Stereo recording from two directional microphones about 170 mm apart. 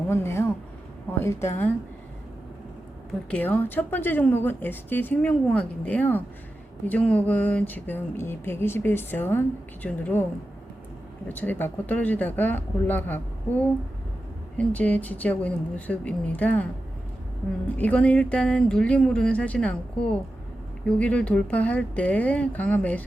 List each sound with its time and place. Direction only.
0.1 s a woman's voice: 15° left (ahead or behind)
3.2 s a woman's voice: 10° left (ahead or behind)
11.3 s a woman's voice: 10° left (ahead or behind)
17.7 s a woman's voice: 10° left (ahead or behind)